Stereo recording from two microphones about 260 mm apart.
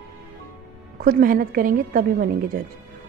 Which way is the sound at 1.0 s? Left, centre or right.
Right.